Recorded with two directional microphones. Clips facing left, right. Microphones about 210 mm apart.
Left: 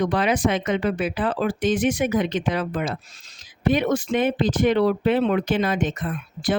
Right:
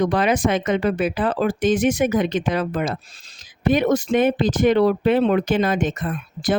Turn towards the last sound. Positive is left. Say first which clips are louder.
# right 2 dB
turn(degrees=-45)  # may be behind; listen again after turning